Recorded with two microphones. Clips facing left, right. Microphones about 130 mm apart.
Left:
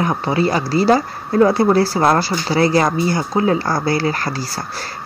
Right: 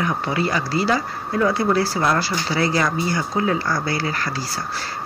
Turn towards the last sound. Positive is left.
turn(degrees=40)  # may be behind; listen again after turning